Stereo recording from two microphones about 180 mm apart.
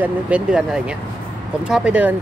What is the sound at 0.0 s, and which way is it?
Speech, 5° right (ahead or behind).